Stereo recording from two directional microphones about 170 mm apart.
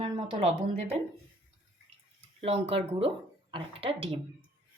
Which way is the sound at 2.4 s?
35° right (ahead or behind).